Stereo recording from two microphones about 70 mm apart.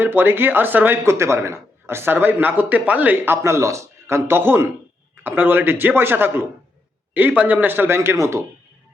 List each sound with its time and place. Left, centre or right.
0.0 s a man's voice: right
1.0 s speech: right
2.1 s a man's voice: right
3.2 s a man's voice: right